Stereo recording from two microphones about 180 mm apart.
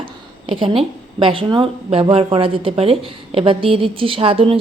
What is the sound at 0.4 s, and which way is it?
A woman's voice, 30° right (ahead or behind).